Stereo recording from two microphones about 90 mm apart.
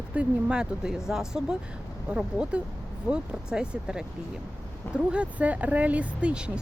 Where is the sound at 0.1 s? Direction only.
10° right (ahead or behind).